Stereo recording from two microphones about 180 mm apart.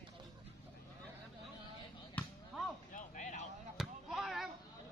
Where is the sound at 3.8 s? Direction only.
Centre (ahead or behind).